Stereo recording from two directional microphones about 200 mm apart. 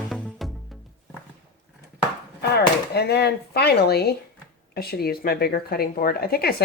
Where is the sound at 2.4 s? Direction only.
55° left (ahead or behind).